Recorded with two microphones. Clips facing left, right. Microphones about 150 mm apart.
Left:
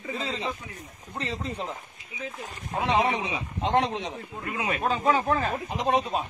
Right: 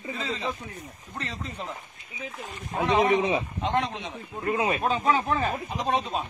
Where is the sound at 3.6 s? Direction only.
30° left (ahead or behind).